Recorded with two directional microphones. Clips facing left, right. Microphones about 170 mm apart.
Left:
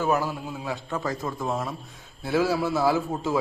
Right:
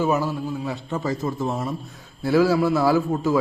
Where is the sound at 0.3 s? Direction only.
5° left (ahead or behind).